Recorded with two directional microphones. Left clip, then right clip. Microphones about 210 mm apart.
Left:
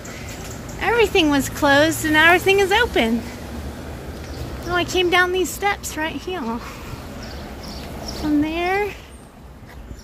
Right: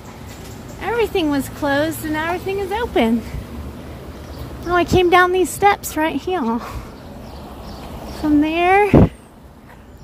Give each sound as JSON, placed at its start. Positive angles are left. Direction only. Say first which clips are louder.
{"t": 0.7, "sound": "speech", "louder": "left 2 dB", "side_deg": -10}
{"t": 2.9, "sound": "speech", "louder": "right 2 dB", "side_deg": -20}
{"t": 4.6, "sound": "speech", "louder": "right 5 dB", "side_deg": -30}
{"t": 8.4, "sound": "speech", "louder": "right 8 dB", "side_deg": -30}